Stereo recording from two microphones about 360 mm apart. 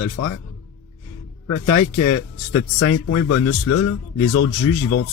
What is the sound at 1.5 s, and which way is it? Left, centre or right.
Speech, left.